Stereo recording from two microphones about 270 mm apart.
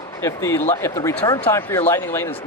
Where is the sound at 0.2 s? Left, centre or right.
Centre.